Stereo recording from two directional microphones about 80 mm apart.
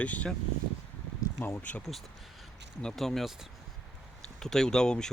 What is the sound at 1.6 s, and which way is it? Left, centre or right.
Speech, centre.